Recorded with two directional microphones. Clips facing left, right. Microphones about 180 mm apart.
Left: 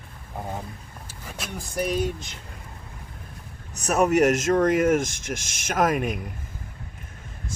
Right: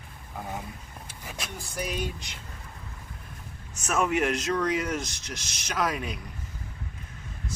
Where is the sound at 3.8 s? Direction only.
40° left (ahead or behind).